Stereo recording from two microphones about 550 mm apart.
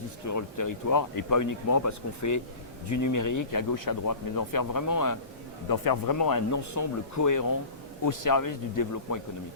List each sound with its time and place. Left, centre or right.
0.3 s speech: left